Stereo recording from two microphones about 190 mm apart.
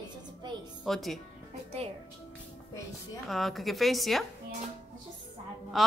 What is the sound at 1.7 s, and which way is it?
Speech, 30° right (ahead or behind).